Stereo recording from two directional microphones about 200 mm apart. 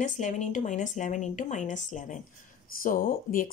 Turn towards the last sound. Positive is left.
turn(degrees=45)  # may be behind; listen again after turning